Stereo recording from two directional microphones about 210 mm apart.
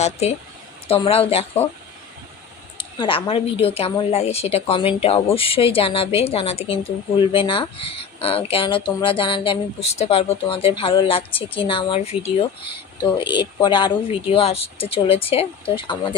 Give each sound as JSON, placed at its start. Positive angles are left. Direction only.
{"t": 0.0, "sound": "speech", "side_deg": 30}
{"t": 2.7, "sound": "speech", "side_deg": 25}